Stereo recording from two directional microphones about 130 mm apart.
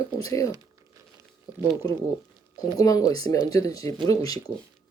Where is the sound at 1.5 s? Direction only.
30° left (ahead or behind).